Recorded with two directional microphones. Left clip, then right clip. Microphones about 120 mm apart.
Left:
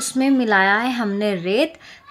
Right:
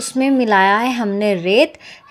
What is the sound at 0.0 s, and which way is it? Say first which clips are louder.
A woman's voice: right 3 dB; 10° right (ahead or behind).